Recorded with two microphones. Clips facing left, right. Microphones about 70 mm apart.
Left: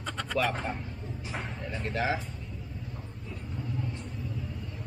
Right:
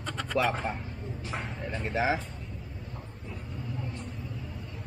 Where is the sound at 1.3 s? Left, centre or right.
Centre.